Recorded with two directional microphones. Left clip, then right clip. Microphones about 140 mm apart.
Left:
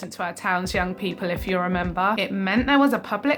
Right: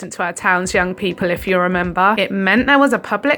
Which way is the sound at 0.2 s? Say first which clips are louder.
Right 8 dB; 45° right (ahead or behind).